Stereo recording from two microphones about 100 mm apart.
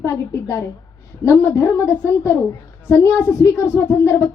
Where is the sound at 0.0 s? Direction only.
30° left (ahead or behind).